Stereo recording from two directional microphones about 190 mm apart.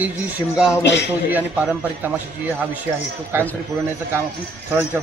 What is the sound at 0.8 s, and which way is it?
Speech, 65° left (ahead or behind).